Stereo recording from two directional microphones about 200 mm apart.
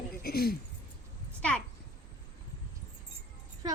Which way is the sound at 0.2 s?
50° left (ahead or behind).